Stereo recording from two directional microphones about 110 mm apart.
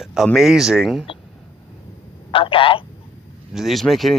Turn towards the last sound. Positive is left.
turn(degrees=0)  # may be behind; listen again after turning